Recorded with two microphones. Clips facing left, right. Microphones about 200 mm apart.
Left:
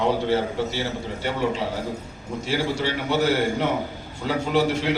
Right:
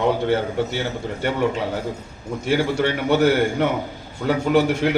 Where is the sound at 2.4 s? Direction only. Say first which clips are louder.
Right 5 dB; 55° right (ahead or behind).